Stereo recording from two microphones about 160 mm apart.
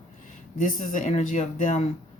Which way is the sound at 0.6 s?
55° left (ahead or behind).